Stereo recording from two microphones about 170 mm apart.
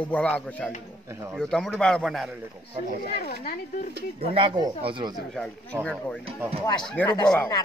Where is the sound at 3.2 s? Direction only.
60° left (ahead or behind).